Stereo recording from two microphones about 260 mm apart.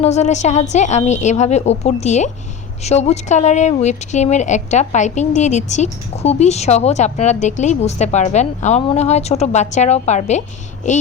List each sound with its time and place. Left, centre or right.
0.0 s speech: left